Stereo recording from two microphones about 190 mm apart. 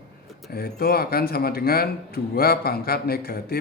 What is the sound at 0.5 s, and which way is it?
Speech, 55° left (ahead or behind).